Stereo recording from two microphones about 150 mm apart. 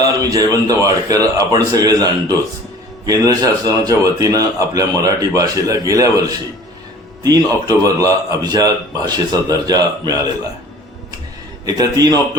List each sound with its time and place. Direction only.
0.2 s a man's voice: 20° right (ahead or behind)
11.6 s a man's voice: 25° right (ahead or behind)